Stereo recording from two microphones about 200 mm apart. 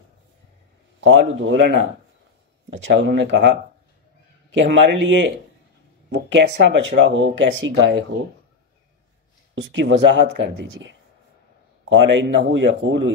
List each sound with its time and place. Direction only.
1.0 s a man's voice: 70° right (ahead or behind)
2.8 s speech: 60° right (ahead or behind)
4.8 s speech: 65° right (ahead or behind)
9.6 s speech: 65° right (ahead or behind)